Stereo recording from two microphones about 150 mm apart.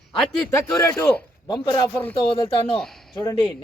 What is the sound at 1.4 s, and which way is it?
Speech, 30° left (ahead or behind).